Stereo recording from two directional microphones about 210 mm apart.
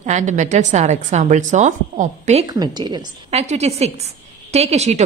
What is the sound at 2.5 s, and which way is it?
A woman's voice, 20° right (ahead or behind).